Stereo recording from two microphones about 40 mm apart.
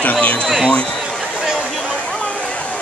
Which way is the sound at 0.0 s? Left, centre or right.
Left.